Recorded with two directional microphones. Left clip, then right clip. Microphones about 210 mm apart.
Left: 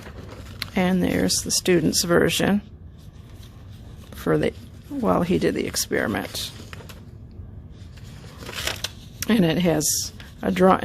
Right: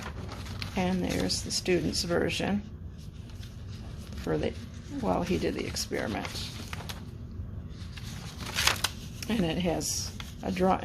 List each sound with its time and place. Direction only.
0.6 s speech: 50° left (ahead or behind)
4.2 s speech: 50° left (ahead or behind)
9.2 s speech: 50° left (ahead or behind)